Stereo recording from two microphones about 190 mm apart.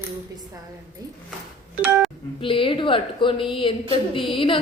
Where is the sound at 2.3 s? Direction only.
30° left (ahead or behind).